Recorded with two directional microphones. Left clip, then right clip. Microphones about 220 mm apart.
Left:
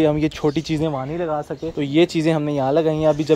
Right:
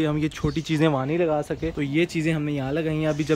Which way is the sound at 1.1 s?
20° right (ahead or behind).